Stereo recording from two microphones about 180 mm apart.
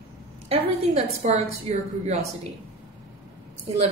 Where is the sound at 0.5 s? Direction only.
40° right (ahead or behind).